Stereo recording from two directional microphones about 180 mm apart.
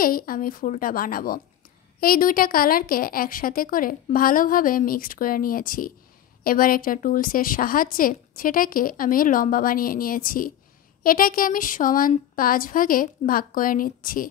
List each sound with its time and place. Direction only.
0.0 s a woman's voice: 55° left (ahead or behind)